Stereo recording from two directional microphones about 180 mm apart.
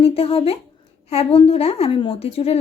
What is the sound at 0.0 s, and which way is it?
A woman's voice, 35° left (ahead or behind).